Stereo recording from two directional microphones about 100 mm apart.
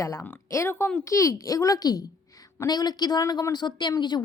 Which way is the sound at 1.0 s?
30° left (ahead or behind).